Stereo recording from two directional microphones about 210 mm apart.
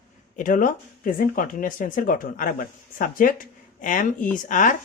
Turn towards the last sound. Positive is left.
turn(degrees=40)  # may be behind; listen again after turning